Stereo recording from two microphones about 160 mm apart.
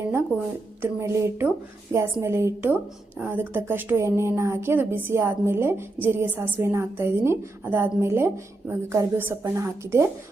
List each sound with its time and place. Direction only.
0.8 s a woman's voice: 15° right (ahead or behind)